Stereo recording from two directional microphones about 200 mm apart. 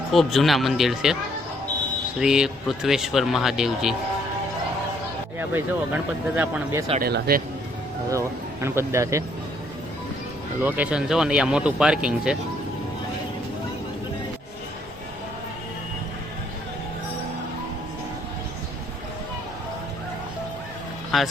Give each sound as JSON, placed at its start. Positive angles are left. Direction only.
{"t": 0.1, "sound": "speech", "side_deg": 0}
{"t": 2.1, "sound": "speech", "side_deg": -5}
{"t": 5.4, "sound": "speech", "side_deg": -10}
{"t": 7.0, "sound": "speech", "side_deg": -50}
{"t": 8.6, "sound": "speech", "side_deg": -15}
{"t": 10.6, "sound": "speech", "side_deg": -10}